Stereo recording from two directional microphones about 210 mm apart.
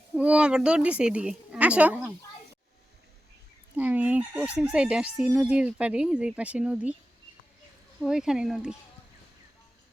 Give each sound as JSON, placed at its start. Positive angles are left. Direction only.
{"t": 0.2, "sound": "speech", "side_deg": -5}
{"t": 3.8, "sound": "speech", "side_deg": -5}
{"t": 8.0, "sound": "speech", "side_deg": -5}